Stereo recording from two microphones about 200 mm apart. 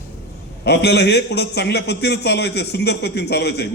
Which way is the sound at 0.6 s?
55° left (ahead or behind).